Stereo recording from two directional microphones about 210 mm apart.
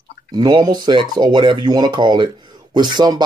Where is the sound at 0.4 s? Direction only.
20° right (ahead or behind).